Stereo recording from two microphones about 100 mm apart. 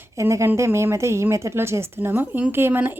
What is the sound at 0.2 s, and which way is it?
A woman's voice, 30° right (ahead or behind).